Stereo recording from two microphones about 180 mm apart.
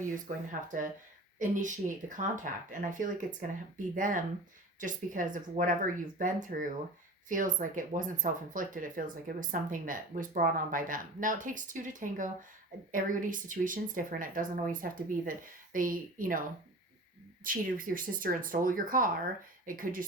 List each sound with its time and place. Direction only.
0.3 s speech: 45° right (ahead or behind)
17.4 s speech: 50° right (ahead or behind)